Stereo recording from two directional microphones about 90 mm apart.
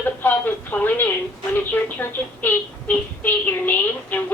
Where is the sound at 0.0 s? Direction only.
20° left (ahead or behind).